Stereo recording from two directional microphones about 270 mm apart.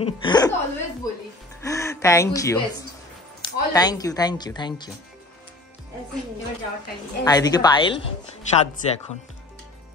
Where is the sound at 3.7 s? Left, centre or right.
Centre.